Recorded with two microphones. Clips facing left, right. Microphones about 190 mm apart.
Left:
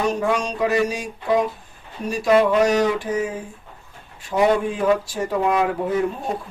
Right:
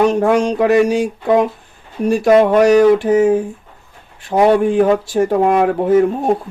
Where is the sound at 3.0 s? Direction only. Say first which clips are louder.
Right 12 dB; 70° right (ahead or behind).